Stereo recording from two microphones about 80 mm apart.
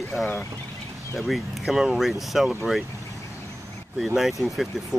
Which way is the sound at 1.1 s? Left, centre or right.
Centre.